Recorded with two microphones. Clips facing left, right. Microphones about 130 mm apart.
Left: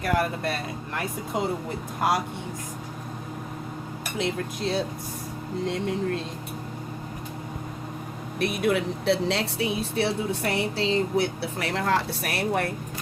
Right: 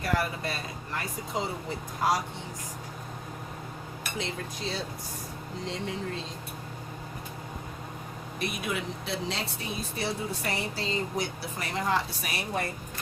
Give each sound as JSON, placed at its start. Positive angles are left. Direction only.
{"t": 0.0, "sound": "speech", "side_deg": 60}
{"t": 4.2, "sound": "speech", "side_deg": 60}
{"t": 8.4, "sound": "speech", "side_deg": 65}